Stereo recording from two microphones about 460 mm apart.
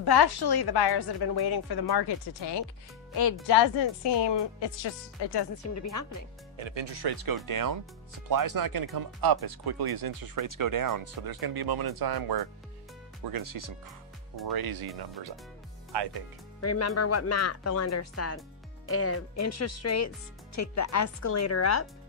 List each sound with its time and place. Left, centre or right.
0.0 s speech: left
5.6 s speech: left
6.5 s speech: right
15.9 s speech: right
16.6 s speech: left